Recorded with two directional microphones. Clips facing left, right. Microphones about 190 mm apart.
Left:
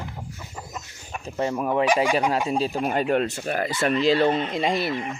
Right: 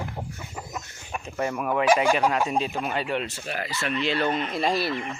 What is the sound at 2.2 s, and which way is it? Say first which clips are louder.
Speech: left 1 dB; 30° left (ahead or behind).